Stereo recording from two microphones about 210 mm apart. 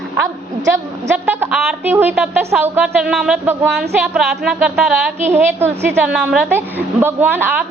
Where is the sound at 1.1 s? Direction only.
10° right (ahead or behind).